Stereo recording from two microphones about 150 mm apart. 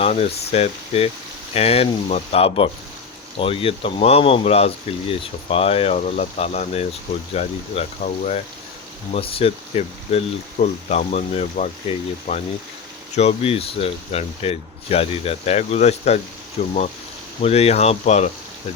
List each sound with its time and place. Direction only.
0.0 s speech: 45° left (ahead or behind)
9.1 s speech: 40° left (ahead or behind)